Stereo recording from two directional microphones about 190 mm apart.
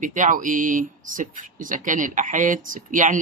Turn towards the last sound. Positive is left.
turn(degrees=-40)  # may be behind; listen again after turning